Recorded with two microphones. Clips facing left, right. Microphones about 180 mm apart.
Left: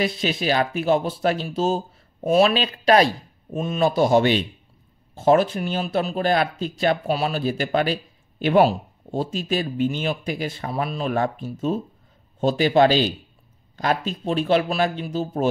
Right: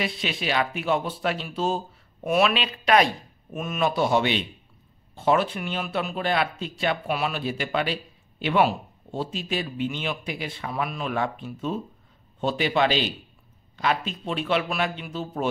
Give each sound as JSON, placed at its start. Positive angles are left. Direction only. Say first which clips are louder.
{"t": 0.0, "sound": "a man's voice", "louder": "left 6 dB", "side_deg": 40}